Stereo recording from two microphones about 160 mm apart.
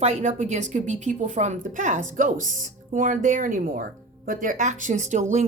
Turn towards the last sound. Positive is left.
turn(degrees=-50)  # may be behind; listen again after turning